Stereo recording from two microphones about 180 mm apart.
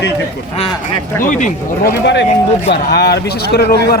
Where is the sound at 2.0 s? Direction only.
75° left (ahead or behind).